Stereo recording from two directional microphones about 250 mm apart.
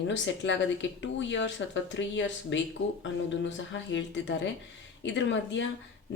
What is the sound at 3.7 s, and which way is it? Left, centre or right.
Speech, left.